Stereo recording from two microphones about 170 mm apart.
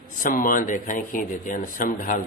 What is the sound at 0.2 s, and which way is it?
Speech, 55° left (ahead or behind).